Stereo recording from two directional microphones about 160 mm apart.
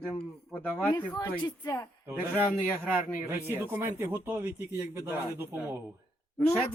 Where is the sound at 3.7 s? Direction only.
15° right (ahead or behind).